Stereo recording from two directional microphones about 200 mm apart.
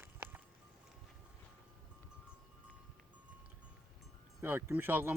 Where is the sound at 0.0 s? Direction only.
10° right (ahead or behind).